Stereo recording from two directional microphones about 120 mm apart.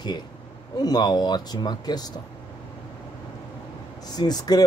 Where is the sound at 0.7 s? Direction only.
35° left (ahead or behind).